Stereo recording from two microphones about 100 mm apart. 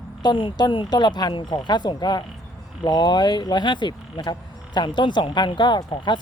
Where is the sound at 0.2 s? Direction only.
50° left (ahead or behind).